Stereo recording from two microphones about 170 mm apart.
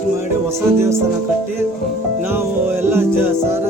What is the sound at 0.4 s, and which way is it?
Speech, 15° right (ahead or behind).